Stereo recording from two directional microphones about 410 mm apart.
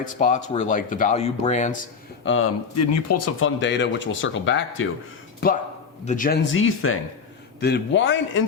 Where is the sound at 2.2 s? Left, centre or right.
Left.